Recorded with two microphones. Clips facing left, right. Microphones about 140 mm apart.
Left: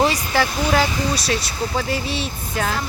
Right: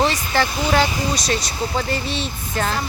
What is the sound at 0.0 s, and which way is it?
Speech, 5° left (ahead or behind).